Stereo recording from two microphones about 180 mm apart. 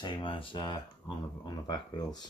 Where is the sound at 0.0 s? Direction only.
25° left (ahead or behind).